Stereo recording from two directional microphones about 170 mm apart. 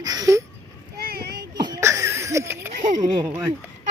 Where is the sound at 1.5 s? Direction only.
25° right (ahead or behind).